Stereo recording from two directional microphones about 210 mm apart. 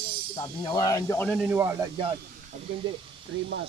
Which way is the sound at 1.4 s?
10° right (ahead or behind).